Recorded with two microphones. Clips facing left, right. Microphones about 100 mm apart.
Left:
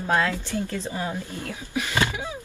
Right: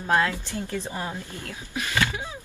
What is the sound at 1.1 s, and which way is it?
Speech, 15° left (ahead or behind).